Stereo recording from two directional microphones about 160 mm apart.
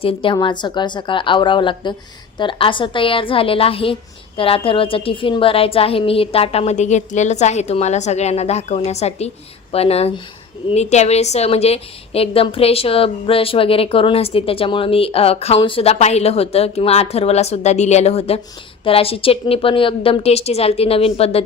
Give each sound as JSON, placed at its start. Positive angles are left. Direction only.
{"t": 0.0, "sound": "a woman's voice", "side_deg": 35}